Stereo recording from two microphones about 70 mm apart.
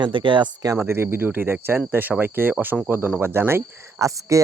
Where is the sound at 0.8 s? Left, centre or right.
Right.